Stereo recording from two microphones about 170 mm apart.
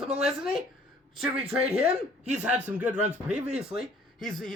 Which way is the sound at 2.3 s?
5° right (ahead or behind).